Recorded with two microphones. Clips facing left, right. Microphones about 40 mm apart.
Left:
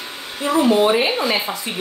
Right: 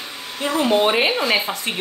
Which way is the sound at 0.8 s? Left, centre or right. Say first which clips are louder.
Left 1 dB; right.